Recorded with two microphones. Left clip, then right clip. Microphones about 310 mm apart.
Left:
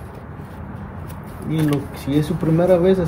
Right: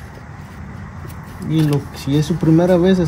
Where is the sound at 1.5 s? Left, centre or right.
Right.